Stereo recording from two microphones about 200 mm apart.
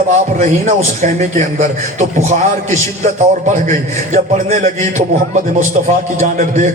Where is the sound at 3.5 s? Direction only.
35° right (ahead or behind).